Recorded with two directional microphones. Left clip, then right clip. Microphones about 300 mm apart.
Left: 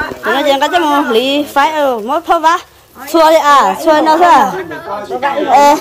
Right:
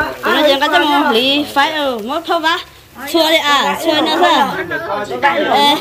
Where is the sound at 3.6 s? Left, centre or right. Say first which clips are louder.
Left 5 dB; left.